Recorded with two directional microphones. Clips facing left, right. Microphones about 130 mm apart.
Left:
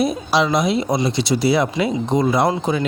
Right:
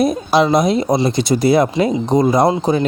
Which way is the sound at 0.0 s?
45° right (ahead or behind).